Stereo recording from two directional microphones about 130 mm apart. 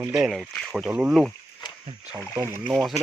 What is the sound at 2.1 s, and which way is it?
Speech, 20° right (ahead or behind).